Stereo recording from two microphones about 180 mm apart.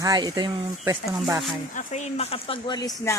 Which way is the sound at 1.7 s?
40° left (ahead or behind).